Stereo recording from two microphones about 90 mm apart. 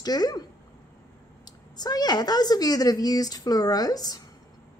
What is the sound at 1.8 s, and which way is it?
Speech, 50° left (ahead or behind).